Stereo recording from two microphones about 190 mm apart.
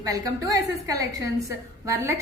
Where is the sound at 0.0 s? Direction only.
20° right (ahead or behind).